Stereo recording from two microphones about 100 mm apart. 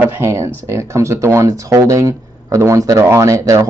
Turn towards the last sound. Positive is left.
turn(degrees=-30)  # may be behind; listen again after turning